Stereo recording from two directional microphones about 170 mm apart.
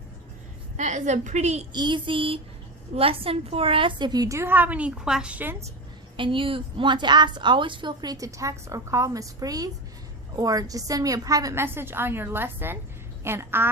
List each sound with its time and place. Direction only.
0.8 s a woman's voice: 45° right (ahead or behind)
1.7 s a woman's voice: 25° right (ahead or behind)
6.1 s a woman's voice: 30° right (ahead or behind); by 13.7 s 15° right (ahead or behind)